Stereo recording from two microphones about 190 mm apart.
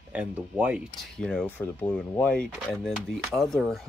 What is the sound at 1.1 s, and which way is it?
Speech, 5° left (ahead or behind).